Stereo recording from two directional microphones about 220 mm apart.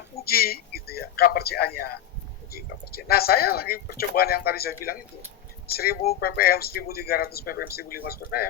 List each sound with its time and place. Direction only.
0.3 s speech: 45° left (ahead or behind)